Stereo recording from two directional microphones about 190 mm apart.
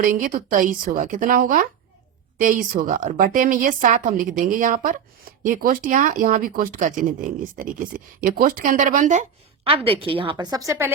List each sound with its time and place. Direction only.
0.0 s speech: 45° right (ahead or behind)
9.6 s a woman's voice: 30° right (ahead or behind); by 10.9 s 15° right (ahead or behind)